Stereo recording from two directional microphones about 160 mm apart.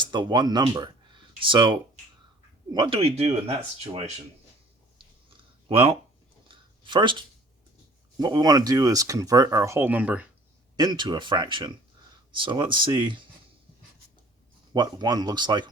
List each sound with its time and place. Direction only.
0.0 s speech: 30° right (ahead or behind)
5.4 s a sound: 35° right (ahead or behind)
8.2 s speech: 25° right (ahead or behind); by 10.2 s 10° right (ahead or behind)
10.8 s speech: 25° right (ahead or behind)
14.7 s speech: 25° right (ahead or behind)